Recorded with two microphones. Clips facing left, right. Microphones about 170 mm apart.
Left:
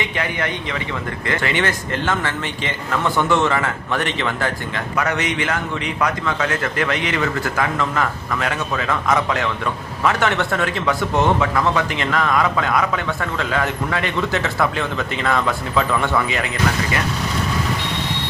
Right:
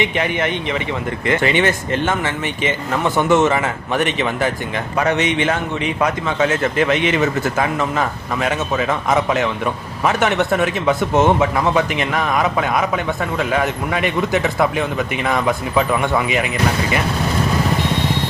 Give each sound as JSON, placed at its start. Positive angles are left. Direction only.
{"t": 0.0, "sound": "a man's voice", "side_deg": -20}